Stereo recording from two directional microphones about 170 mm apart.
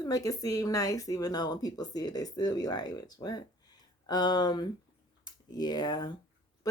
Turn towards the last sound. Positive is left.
turn(degrees=25)  # may be behind; listen again after turning